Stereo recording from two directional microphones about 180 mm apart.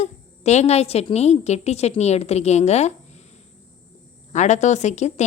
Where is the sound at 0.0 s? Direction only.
40° left (ahead or behind).